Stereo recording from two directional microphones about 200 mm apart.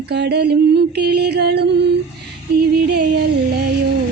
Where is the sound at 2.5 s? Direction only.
45° right (ahead or behind).